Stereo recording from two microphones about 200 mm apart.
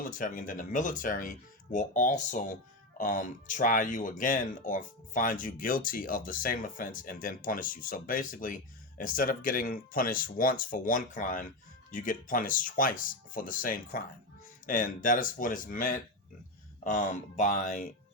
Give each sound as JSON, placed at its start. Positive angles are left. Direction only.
{"t": 0.0, "sound": "speech", "side_deg": 40}